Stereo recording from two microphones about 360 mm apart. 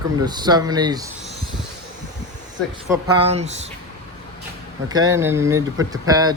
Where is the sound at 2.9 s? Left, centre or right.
Centre.